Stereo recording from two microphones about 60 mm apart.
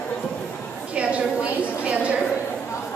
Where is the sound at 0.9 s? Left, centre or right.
Centre.